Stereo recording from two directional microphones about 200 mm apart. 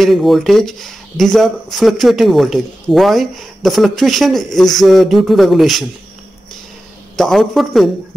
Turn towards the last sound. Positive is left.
turn(degrees=0)  # may be behind; listen again after turning